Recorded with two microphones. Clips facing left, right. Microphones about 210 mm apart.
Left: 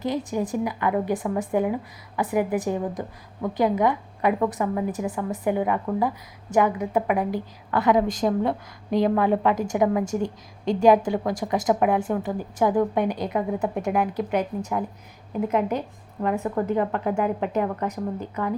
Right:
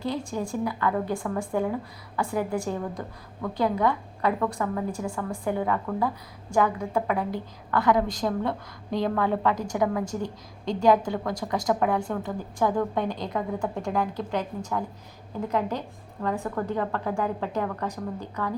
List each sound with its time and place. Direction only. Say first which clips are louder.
0.0 s a woman's voice: left 4 dB; 20° left (ahead or behind)
10.2 s a woman's voice: left 5 dB; 20° right (ahead or behind)
10.8 s a woman's voice: left 3 dB; 20° left (ahead or behind)